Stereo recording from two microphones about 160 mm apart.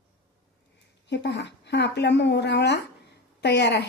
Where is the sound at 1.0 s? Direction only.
90° left.